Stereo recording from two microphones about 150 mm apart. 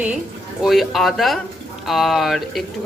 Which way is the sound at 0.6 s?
Centre (ahead or behind).